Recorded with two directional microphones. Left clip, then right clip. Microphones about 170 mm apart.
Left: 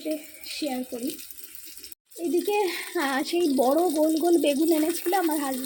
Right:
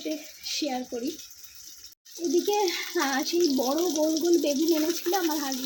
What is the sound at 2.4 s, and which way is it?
Speech, 20° left (ahead or behind).